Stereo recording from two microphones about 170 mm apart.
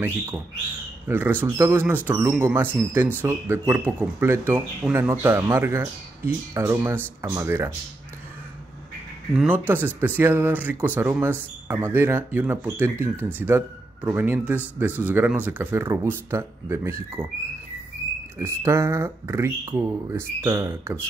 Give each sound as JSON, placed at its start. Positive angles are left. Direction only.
{"t": 1.0, "sound": "speech", "side_deg": -10}
{"t": 9.3, "sound": "speech", "side_deg": -10}
{"t": 18.0, "sound": "a sound", "side_deg": 20}
{"t": 18.4, "sound": "speech", "side_deg": -15}